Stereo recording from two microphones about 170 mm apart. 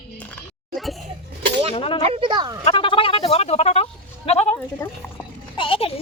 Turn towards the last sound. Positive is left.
turn(degrees=35)  # may be behind; listen again after turning